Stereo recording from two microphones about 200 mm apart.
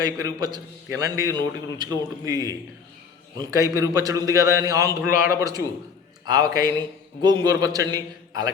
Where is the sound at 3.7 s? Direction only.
15° right (ahead or behind).